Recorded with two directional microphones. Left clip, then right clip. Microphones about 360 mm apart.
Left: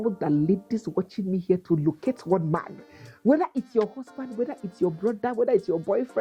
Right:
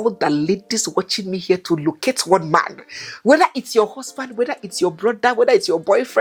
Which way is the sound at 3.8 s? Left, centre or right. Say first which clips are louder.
Right 8 dB; centre.